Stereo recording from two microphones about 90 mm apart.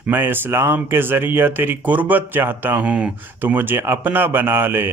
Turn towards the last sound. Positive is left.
turn(degrees=-25)  # may be behind; listen again after turning